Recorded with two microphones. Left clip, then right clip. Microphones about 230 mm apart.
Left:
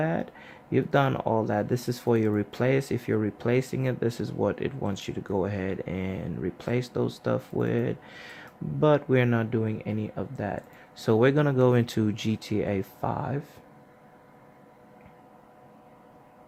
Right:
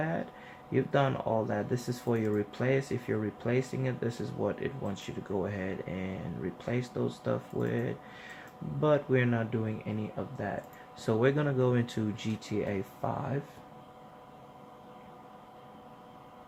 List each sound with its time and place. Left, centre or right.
0.0 s speech: left